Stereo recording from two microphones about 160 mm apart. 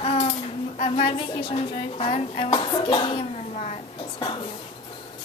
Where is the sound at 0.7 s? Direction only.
40° left (ahead or behind).